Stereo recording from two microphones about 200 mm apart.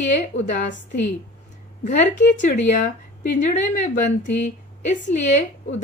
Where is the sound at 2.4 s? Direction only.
35° left (ahead or behind).